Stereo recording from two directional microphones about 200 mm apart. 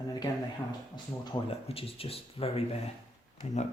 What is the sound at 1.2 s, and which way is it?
Speech, 25° left (ahead or behind).